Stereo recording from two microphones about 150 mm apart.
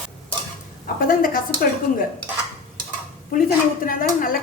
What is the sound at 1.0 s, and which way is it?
Speech, 70° left (ahead or behind).